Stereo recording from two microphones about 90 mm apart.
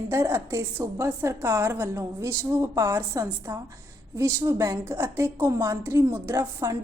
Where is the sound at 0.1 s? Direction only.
30° right (ahead or behind).